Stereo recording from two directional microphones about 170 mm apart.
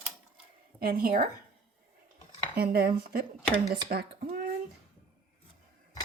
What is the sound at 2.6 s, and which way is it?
Speech, 65° right (ahead or behind).